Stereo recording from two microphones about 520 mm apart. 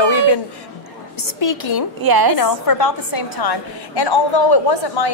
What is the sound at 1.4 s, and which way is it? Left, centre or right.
Speech, left.